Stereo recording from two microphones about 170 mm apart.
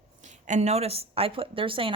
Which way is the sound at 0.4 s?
45° right (ahead or behind).